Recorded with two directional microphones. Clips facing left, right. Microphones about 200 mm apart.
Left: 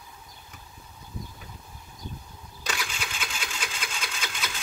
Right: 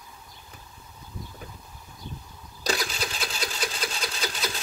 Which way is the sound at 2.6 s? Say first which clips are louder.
Right 6 dB; 35° right (ahead or behind).